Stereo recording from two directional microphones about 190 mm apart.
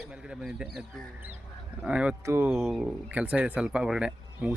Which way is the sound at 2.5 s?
Centre (ahead or behind).